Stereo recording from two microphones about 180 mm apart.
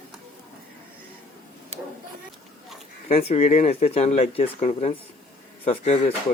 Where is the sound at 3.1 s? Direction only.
35° left (ahead or behind).